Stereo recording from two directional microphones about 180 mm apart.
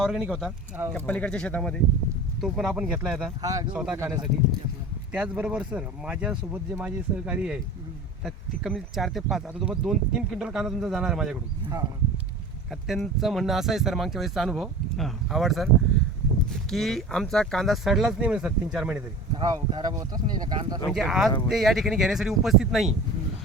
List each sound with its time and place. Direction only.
0.0 s speech: centre (ahead or behind)
3.4 s speech: 20° right (ahead or behind)
3.7 s speech: 5° right (ahead or behind)
3.9 s speech: 15° right (ahead or behind)
12.7 s speech: centre (ahead or behind)
19.4 s speech: 20° right (ahead or behind)
20.9 s speech: centre (ahead or behind)